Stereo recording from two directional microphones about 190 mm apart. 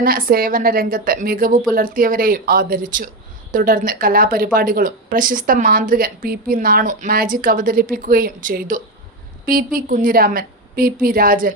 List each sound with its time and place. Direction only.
0.0 s a woman's voice: 50° right (ahead or behind)